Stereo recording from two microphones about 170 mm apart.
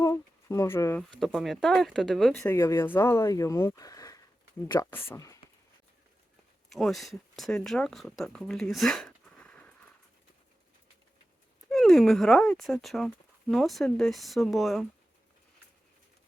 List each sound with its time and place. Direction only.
0.0 s speech: 20° left (ahead or behind)
1.2 s speech: centre (ahead or behind)
2.5 s speech: 15° left (ahead or behind)
6.7 s speech: centre (ahead or behind)
11.7 s speech: centre (ahead or behind)